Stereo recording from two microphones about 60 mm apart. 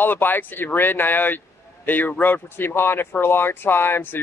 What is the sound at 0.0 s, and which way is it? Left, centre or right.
Speech, left.